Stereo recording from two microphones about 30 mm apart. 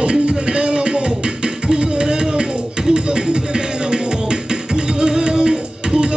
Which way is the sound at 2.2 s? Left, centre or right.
Right.